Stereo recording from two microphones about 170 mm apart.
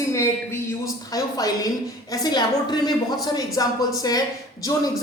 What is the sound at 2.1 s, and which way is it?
A woman's voice, 25° left (ahead or behind).